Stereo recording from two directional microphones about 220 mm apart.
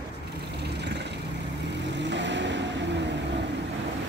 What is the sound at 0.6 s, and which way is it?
Vehicle, 50° right (ahead or behind).